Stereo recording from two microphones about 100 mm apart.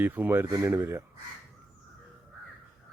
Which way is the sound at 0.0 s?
20° right (ahead or behind).